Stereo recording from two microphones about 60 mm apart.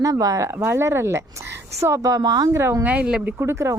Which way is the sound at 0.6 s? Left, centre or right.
Right.